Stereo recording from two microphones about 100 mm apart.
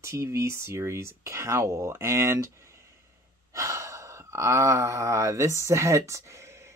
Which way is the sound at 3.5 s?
30° right (ahead or behind).